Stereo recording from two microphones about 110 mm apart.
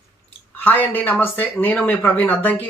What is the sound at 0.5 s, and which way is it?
Speech, 15° left (ahead or behind).